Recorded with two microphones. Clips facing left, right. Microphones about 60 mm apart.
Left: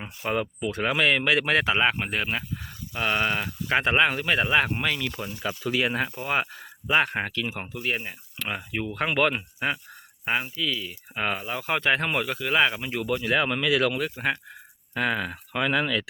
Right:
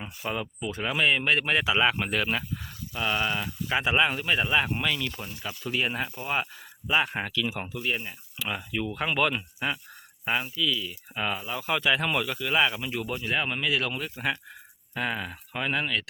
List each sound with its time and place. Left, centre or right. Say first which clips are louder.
0.0 s speech: left 4 dB; left
1.6 s speech: left 1 dB; left; by 2.6 s centre
2.9 s speech: left 3 dB; left
5.4 s speech: left 4 dB; left
6.1 s speech: left 3 dB; left
7.9 s speech: left 3 dB; left
8.5 s speech: even; left
9.0 s speech: left 3 dB; left
9.3 s speech: left 2 dB; left
14.2 s speech: even; left
14.9 s speech: left 4 dB; left